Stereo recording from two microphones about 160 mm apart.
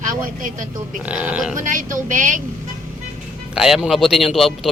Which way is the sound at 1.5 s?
55° right (ahead or behind).